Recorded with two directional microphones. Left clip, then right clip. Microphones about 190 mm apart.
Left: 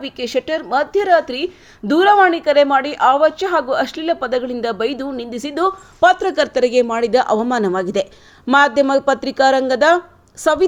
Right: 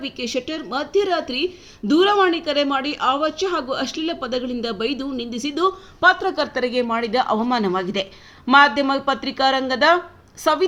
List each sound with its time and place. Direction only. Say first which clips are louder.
0.0 s a woman's voice: left 5 dB; 25° left (ahead or behind)
6.0 s speech: left 4 dB; 40° left (ahead or behind)